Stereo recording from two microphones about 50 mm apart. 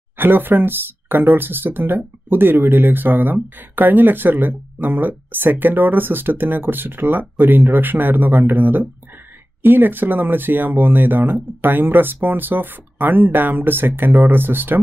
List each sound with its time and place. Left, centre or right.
0.2 s speech: right